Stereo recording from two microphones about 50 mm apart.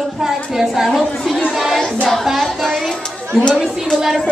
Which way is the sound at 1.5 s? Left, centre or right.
Centre.